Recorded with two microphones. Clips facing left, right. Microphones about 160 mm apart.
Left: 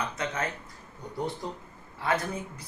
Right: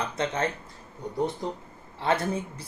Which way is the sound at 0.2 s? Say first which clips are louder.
Right 7 dB; 30° right (ahead or behind).